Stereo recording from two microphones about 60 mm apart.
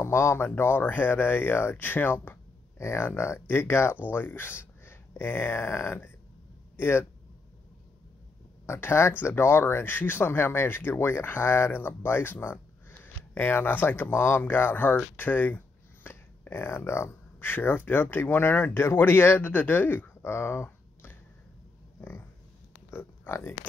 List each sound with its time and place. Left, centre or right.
0.0 s speech: left
8.6 s speech: left
15.1 s a sound: left
17.5 s speech: left
22.8 s oink: left